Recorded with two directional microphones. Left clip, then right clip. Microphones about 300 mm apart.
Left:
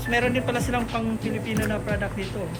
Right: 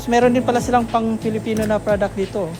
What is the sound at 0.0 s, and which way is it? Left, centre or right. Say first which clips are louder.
Speech: right 8 dB; centre.